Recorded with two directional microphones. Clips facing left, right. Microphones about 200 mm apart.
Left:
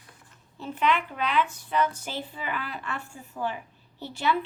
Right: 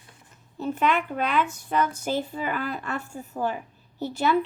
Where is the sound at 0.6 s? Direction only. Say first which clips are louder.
Right 2 dB; 45° right (ahead or behind).